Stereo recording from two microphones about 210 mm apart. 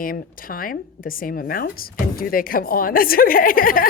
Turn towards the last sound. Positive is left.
turn(degrees=40)  # may be behind; listen again after turning